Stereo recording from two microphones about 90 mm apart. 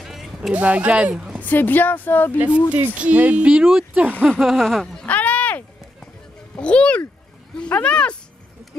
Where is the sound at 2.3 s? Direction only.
15° right (ahead or behind).